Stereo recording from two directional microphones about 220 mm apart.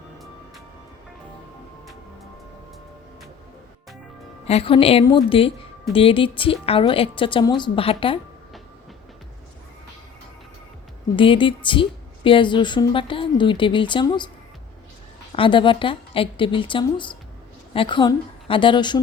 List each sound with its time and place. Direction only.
4.4 s a woman's voice: 25° left (ahead or behind)
11.2 s a woman's voice: 25° left (ahead or behind)
15.3 s a woman's voice: 25° left (ahead or behind)